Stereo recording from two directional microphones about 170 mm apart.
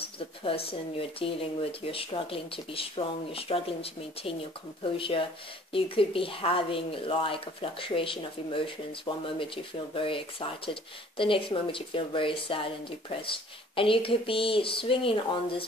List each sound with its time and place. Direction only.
0.4 s speech: 35° left (ahead or behind)